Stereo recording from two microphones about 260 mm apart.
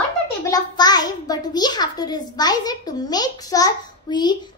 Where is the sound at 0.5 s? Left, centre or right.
Centre.